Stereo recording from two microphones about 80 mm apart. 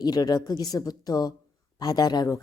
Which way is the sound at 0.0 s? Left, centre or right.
Left.